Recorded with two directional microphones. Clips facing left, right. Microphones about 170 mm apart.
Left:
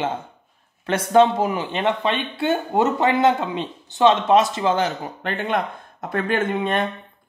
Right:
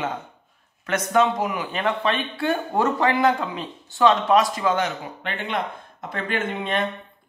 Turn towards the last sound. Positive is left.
turn(degrees=50)  # may be behind; listen again after turning